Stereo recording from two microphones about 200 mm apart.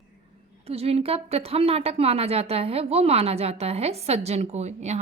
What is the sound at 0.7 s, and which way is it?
Speech, 30° right (ahead or behind).